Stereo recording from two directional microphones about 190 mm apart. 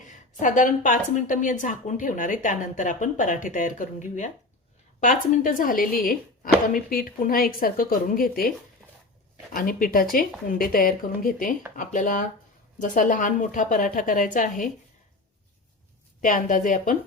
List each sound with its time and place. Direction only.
0.3 s a woman's voice: 40° left (ahead or behind)
9.6 s a woman's voice: 45° left (ahead or behind)
16.2 s a woman's voice: 45° left (ahead or behind)